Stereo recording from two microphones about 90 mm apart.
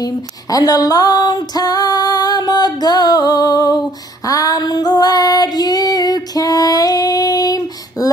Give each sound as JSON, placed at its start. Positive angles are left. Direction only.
{"t": 0.0, "sound": "female singing", "side_deg": 45}